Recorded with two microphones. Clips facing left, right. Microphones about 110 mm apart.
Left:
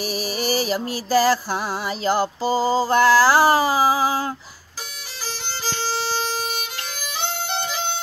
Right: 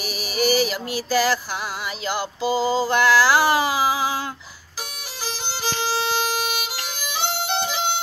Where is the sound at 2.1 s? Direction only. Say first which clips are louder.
Left 3 dB; 40° left (ahead or behind).